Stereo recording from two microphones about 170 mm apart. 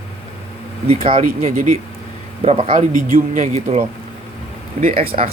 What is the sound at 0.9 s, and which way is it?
Speech, 35° right (ahead or behind).